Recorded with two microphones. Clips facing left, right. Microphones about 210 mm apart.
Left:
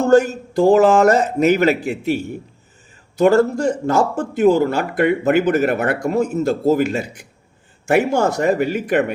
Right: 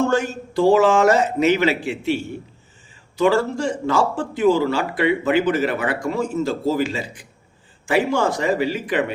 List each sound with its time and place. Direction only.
0.1 s a man's voice: 40° left (ahead or behind)
6.0 s speech: 60° left (ahead or behind)
7.9 s speech: 45° left (ahead or behind)